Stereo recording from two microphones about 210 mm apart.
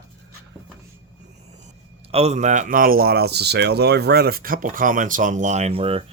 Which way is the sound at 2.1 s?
30° right (ahead or behind).